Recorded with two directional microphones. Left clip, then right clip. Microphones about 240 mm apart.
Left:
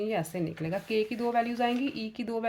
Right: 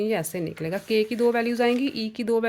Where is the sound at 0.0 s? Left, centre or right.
Right.